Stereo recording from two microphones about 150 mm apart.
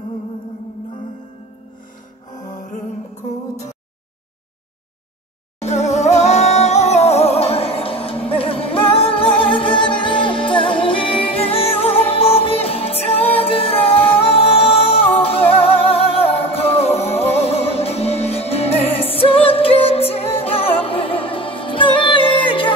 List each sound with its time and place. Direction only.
2.4 s music: 60° left (ahead or behind)
5.6 s music: 45° left (ahead or behind)